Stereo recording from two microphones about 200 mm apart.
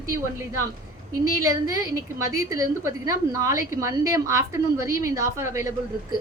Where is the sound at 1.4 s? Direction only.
15° right (ahead or behind).